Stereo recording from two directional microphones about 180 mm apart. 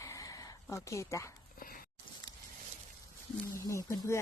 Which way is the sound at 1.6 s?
55° left (ahead or behind).